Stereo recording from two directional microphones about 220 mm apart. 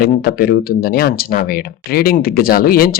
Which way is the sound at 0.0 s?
45° left (ahead or behind).